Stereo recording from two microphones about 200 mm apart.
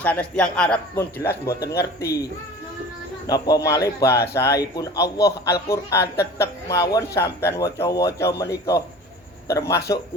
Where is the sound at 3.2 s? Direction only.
20° left (ahead or behind).